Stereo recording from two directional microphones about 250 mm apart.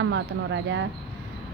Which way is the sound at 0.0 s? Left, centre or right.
Right.